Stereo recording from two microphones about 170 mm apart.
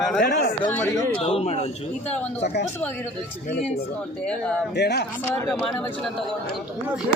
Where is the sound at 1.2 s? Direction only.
35° left (ahead or behind).